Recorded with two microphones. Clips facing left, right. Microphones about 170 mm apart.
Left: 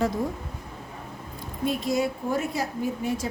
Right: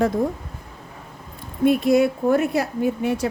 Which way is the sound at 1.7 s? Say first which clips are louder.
Right 9 dB; 60° right (ahead or behind).